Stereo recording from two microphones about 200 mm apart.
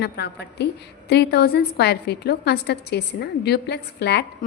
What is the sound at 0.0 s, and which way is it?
A woman's voice, 55° left (ahead or behind).